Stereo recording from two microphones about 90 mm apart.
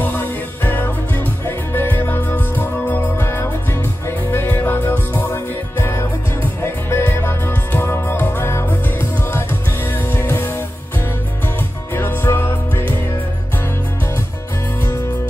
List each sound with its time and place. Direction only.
0.0 s music: 20° left (ahead or behind)
11.9 s music: 25° left (ahead or behind)